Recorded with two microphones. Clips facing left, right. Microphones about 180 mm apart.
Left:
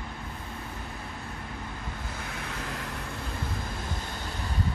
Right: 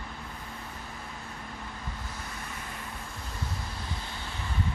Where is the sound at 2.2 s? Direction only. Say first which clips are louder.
Left 4 dB; 75° left (ahead or behind).